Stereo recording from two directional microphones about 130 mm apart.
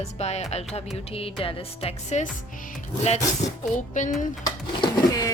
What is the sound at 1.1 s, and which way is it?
Speech, 45° left (ahead or behind).